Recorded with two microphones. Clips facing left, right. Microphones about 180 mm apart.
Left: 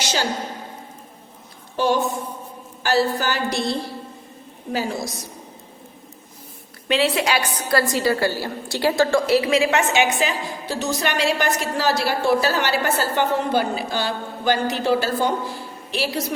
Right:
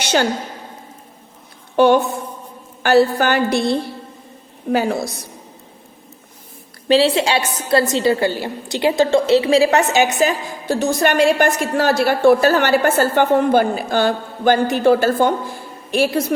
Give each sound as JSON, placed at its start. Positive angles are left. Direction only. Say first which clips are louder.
{"t": 0.0, "sound": "a woman's voice", "louder": "right 7 dB", "side_deg": -60}
{"t": 1.7, "sound": "a woman's voice", "louder": "right 7 dB", "side_deg": -60}
{"t": 6.8, "sound": "a woman's voice", "louder": "right 6 dB", "side_deg": -30}